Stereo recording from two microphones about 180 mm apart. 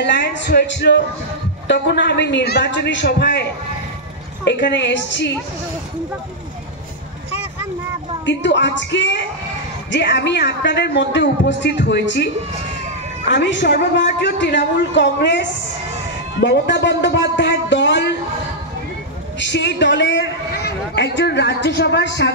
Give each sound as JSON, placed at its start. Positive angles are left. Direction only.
{"t": 0.0, "sound": "a man's voice", "side_deg": 75}
{"t": 4.5, "sound": "speech", "side_deg": 75}
{"t": 8.3, "sound": "speech", "side_deg": 80}
{"t": 9.8, "sound": "a man's voice", "side_deg": 75}
{"t": 13.3, "sound": "a man's voice", "side_deg": 75}
{"t": 16.3, "sound": "a sound", "side_deg": 75}
{"t": 19.5, "sound": "a man's voice", "side_deg": 75}